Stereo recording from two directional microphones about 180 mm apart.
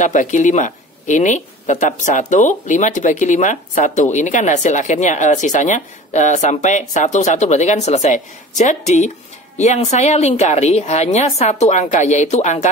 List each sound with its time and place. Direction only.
0.0 s a woman's voice: 45° left (ahead or behind)